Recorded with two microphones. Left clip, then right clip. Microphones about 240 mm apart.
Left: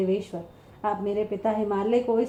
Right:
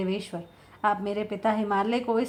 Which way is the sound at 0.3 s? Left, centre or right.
Right.